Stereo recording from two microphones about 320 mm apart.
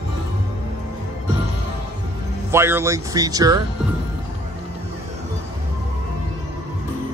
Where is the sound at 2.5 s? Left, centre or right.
Centre.